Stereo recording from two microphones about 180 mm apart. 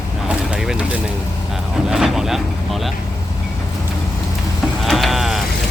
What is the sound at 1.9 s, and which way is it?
Vehicle, centre (ahead or behind).